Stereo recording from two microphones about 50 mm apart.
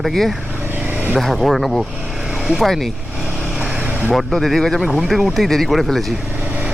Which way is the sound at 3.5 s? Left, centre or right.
Centre.